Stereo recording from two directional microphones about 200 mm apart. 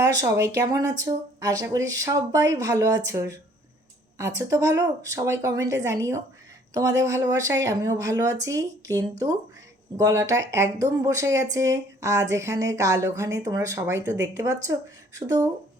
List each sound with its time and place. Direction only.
0.0 s speech: 15° right (ahead or behind)
4.4 s speech: 15° right (ahead or behind)